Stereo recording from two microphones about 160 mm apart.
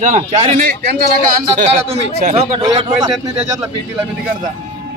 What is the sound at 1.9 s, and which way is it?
Speech, 40° right (ahead or behind).